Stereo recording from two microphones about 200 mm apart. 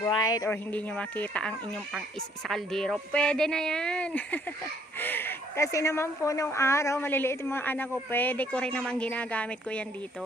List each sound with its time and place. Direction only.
0.2 s speech: 20° left (ahead or behind)